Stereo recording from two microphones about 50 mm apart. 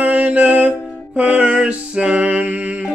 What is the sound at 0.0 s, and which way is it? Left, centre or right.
Music, right.